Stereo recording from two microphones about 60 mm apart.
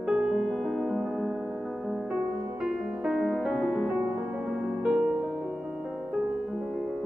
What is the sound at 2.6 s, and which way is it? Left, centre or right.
Music, centre.